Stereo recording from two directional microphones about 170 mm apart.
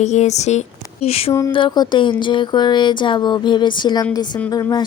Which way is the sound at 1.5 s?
25° left (ahead or behind).